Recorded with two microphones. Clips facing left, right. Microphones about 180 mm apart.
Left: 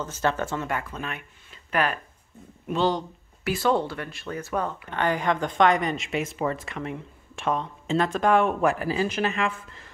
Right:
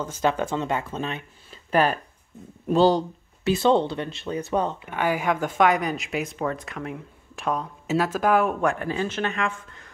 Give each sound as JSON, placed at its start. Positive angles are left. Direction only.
{"t": 0.0, "sound": "speech", "side_deg": -15}
{"t": 4.8, "sound": "speech", "side_deg": -10}